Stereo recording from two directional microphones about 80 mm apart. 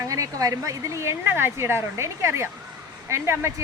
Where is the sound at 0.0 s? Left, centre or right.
Right.